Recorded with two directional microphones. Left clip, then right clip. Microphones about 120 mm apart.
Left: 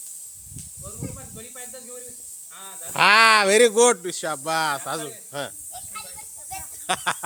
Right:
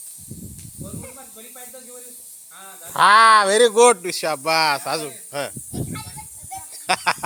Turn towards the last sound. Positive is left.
turn(degrees=5)  # may be behind; listen again after turning